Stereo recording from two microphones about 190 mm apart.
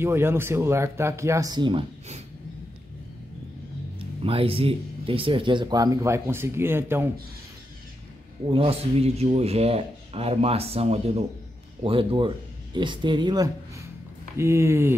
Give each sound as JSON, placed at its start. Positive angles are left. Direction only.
{"t": 0.0, "sound": "speech", "side_deg": -10}
{"t": 4.2, "sound": "speech", "side_deg": -30}
{"t": 8.5, "sound": "speech", "side_deg": -30}